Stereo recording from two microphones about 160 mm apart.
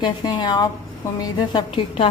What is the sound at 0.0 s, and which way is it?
A woman's voice, 30° left (ahead or behind).